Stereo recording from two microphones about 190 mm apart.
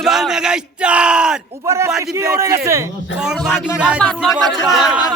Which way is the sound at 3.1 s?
5° right (ahead or behind).